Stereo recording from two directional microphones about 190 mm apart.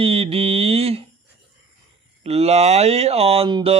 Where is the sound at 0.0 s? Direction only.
30° right (ahead or behind).